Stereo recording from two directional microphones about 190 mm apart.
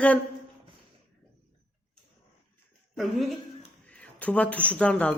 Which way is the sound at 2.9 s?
Centre (ahead or behind).